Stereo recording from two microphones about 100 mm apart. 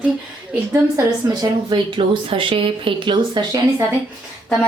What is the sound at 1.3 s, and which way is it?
Speech, 45° right (ahead or behind).